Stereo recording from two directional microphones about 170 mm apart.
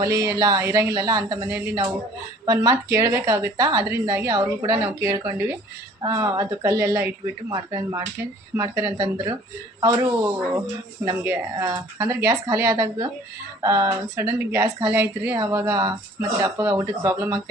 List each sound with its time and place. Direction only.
0.0 s speech: 20° right (ahead or behind)